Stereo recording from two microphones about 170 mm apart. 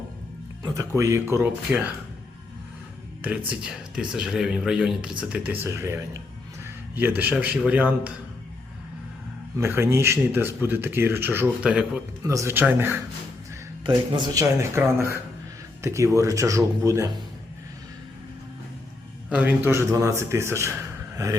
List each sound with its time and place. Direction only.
0.6 s speech: 20° right (ahead or behind)
3.2 s speech: 5° right (ahead or behind)
9.6 s speech: 15° right (ahead or behind)
12.2 s speech: 20° right (ahead or behind)
13.8 s speech: 25° right (ahead or behind)
19.3 s speech: 10° right (ahead or behind)